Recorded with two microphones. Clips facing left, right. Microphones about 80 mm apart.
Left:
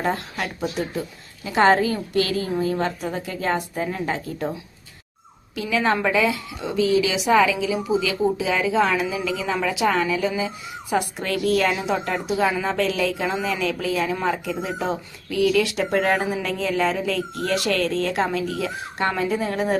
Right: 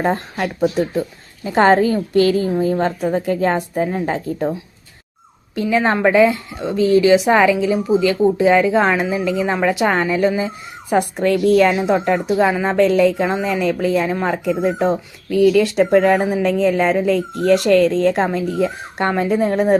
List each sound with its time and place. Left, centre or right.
0.0 s a woman's voice: right
1.5 s a woman's voice: right
5.7 s a woman's voice: right
15.5 s a woman's voice: right